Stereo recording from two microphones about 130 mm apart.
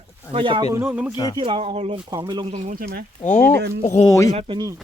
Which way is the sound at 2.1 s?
30° right (ahead or behind).